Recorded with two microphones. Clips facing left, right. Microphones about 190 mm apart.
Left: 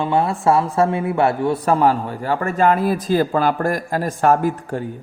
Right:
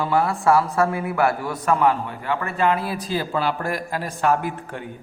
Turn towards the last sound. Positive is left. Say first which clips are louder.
# left 8 dB
turn(degrees=40)  # may be behind; listen again after turning